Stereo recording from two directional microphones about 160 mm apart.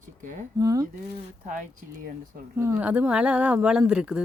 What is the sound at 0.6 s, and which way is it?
Speech, 20° right (ahead or behind).